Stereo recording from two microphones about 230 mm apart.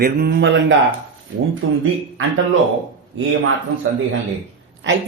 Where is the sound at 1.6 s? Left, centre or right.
Right.